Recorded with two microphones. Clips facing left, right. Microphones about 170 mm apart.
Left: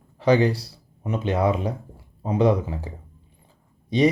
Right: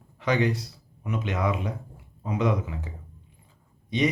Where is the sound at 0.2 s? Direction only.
30° left (ahead or behind).